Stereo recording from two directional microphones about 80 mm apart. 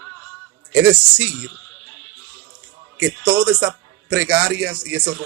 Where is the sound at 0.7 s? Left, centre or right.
Centre.